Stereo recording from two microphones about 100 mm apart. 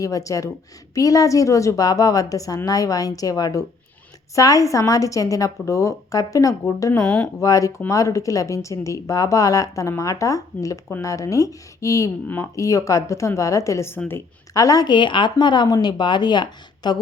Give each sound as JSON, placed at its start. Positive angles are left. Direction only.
{"t": 0.0, "sound": "a woman's voice", "side_deg": 35}